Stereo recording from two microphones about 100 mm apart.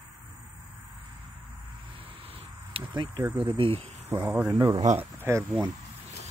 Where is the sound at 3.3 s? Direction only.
55° right (ahead or behind).